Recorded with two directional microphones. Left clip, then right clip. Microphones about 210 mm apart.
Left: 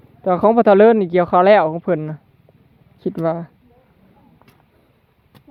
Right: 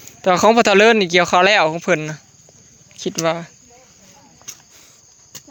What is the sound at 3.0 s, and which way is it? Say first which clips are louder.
Speech: right 1 dB; 20° left (ahead or behind).